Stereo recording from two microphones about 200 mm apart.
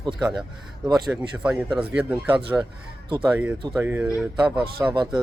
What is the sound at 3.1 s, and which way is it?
Speech, 25° right (ahead or behind).